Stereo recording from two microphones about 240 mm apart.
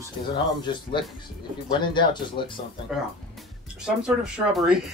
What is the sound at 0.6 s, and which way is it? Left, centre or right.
Speech, centre.